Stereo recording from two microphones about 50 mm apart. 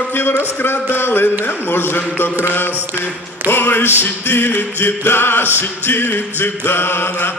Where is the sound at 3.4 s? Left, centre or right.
Left.